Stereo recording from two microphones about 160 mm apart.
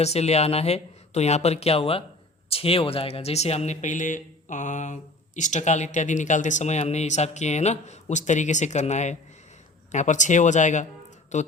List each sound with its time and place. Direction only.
0.0 s speech: 40° left (ahead or behind)